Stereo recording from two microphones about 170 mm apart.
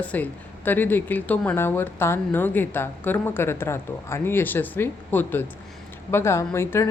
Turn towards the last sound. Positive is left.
turn(degrees=15)  # may be behind; listen again after turning